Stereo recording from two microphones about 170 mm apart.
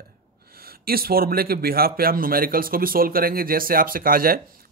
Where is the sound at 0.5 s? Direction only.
65° right (ahead or behind).